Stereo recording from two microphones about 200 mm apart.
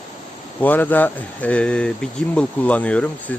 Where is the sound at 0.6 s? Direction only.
10° left (ahead or behind).